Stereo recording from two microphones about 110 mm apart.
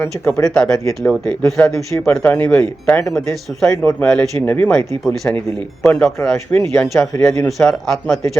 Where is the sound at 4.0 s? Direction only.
15° left (ahead or behind).